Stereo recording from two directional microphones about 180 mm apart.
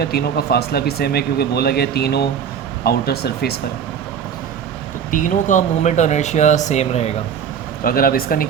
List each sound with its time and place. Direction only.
0.0 s speech: 60° left (ahead or behind)
5.1 s speech: 45° left (ahead or behind)
7.9 s speech: 55° left (ahead or behind)